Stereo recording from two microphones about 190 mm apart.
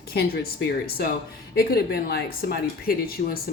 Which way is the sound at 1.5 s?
55° left (ahead or behind).